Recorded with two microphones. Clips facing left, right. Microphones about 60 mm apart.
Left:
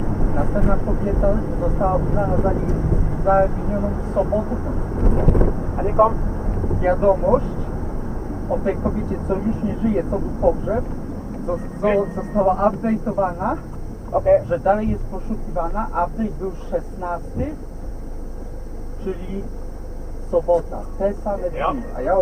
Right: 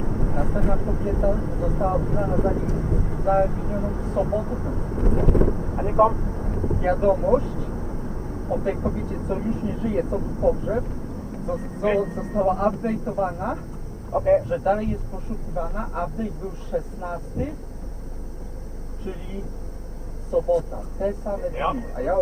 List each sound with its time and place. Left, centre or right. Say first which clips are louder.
0.0 s speech: left 3 dB; centre
19.1 s speech: left 7 dB; centre
20.3 s speech: left 4 dB; centre